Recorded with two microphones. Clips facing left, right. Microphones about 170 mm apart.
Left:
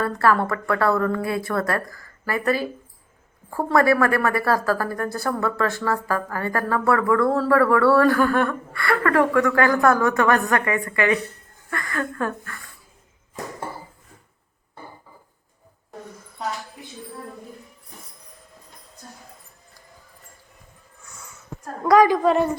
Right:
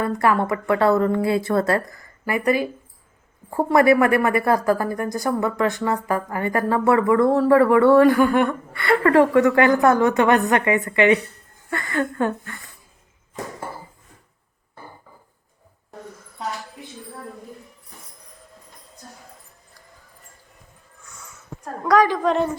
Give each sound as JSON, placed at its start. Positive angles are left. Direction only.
{"t": 0.0, "sound": "a woman's voice", "side_deg": -15}
{"t": 21.8, "sound": "a woman's voice", "side_deg": 10}